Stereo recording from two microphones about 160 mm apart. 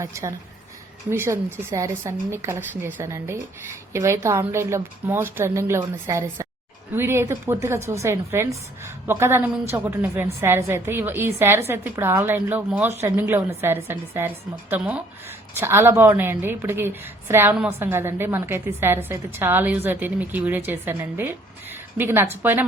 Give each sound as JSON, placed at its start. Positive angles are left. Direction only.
{"t": 0.0, "sound": "a woman's voice", "side_deg": -20}